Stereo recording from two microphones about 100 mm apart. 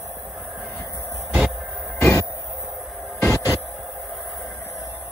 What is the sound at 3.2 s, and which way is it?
Music, 30° left (ahead or behind).